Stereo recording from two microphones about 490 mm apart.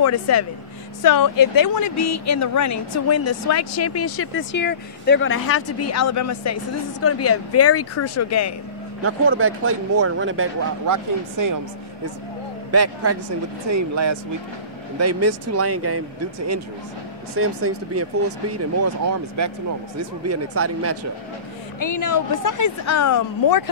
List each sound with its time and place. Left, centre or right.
0.0 s speech: left
9.0 s speech: right
10.9 s speech: right
12.7 s speech: right
21.7 s speech: left